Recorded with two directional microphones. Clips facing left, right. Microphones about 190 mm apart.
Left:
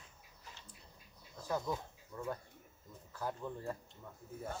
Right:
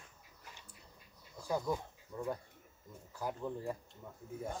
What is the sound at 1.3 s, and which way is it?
Speech, 10° right (ahead or behind).